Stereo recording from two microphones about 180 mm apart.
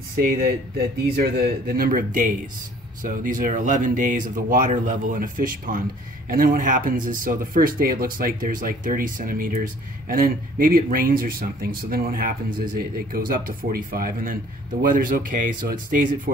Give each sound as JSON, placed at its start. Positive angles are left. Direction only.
{"t": 0.2, "sound": "speech", "side_deg": -60}